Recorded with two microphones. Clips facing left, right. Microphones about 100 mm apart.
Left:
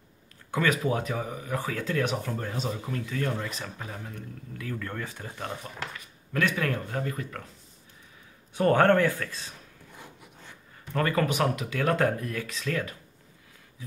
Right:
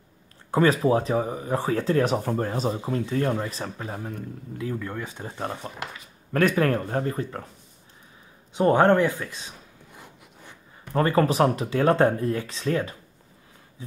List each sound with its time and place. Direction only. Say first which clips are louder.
0.5 s speech: right 6 dB; 35° right (ahead or behind)
4.6 s speech: right 4 dB; 25° right (ahead or behind)
6.3 s speech: right 6 dB; 45° right (ahead or behind)
8.5 s speech: right 3 dB; 20° right (ahead or behind)
10.9 s speech: right 5 dB; 30° right (ahead or behind)